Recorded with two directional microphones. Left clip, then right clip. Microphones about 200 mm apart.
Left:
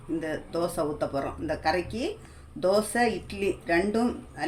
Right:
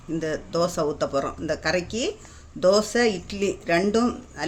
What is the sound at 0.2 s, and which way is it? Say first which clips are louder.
Speech: right 7 dB; 45° right (ahead or behind).